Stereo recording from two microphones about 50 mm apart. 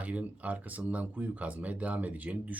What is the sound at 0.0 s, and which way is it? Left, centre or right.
Speech, right.